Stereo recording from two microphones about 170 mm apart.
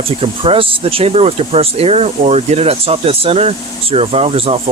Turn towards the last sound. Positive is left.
turn(degrees=-35)  # may be behind; listen again after turning